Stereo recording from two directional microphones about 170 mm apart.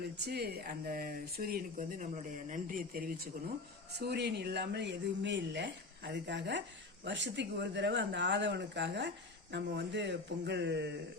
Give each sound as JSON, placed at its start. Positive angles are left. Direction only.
{"t": 0.0, "sound": "speech", "side_deg": -70}
{"t": 3.9, "sound": "speech", "side_deg": -75}